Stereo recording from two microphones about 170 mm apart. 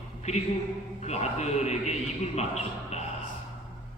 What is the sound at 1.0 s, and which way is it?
Speech, 40° left (ahead or behind).